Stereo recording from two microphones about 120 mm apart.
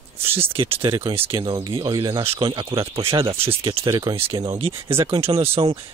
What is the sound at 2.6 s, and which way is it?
Speech, 25° right (ahead or behind).